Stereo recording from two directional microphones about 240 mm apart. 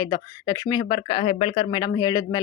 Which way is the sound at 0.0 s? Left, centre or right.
Centre.